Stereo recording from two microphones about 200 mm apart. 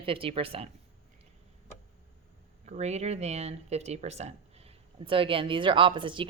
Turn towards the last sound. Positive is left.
turn(degrees=-25)  # may be behind; listen again after turning